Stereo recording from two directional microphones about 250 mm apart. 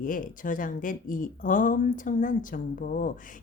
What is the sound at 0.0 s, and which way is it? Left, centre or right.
Speech, left.